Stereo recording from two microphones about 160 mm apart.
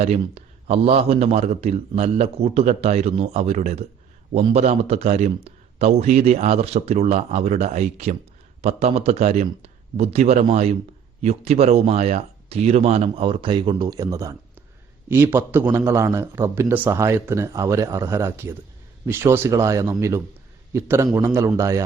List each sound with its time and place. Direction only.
0.0 s a man's voice: 40° right (ahead or behind); by 21.8 s 20° right (ahead or behind)